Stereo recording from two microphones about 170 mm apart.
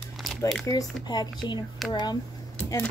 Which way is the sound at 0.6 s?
20° left (ahead or behind).